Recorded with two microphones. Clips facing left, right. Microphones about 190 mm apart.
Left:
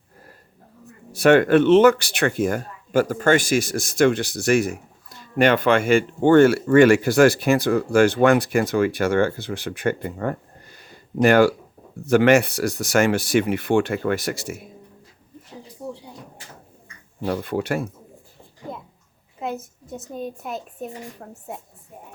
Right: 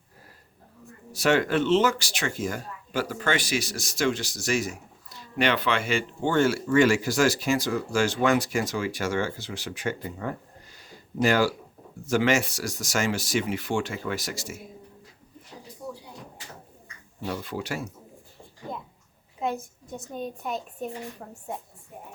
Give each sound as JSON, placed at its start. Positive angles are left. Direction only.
{"t": 1.1, "sound": "speech", "side_deg": 55}
{"t": 17.2, "sound": "speech", "side_deg": 55}
{"t": 19.4, "sound": "a woman's voice", "side_deg": 5}